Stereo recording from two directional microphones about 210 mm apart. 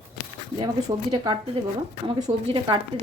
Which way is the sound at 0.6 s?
20° right (ahead or behind).